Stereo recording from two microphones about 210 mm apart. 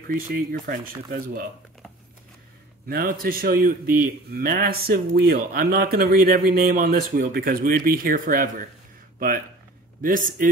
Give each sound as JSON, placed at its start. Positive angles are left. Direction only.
{"t": 0.1, "sound": "speech", "side_deg": -45}
{"t": 2.9, "sound": "speech", "side_deg": -45}
{"t": 10.0, "sound": "a man's voice", "side_deg": -40}